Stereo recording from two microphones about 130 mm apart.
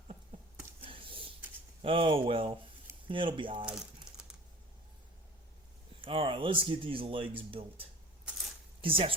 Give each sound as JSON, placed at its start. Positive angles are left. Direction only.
{"t": 0.8, "sound": "a sound", "side_deg": -45}
{"t": 1.8, "sound": "speech", "side_deg": -45}
{"t": 6.0, "sound": "speech", "side_deg": -45}